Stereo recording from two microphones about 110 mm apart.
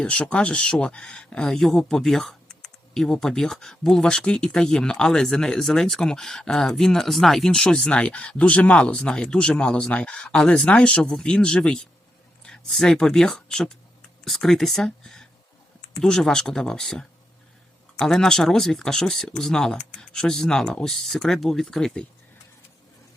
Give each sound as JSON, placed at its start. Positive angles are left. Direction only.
{"t": 0.0, "sound": "speech", "side_deg": 10}